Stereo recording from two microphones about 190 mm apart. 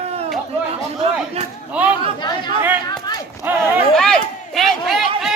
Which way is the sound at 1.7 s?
5° right (ahead or behind).